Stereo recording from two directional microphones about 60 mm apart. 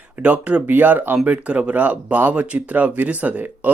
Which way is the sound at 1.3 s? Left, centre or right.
Right.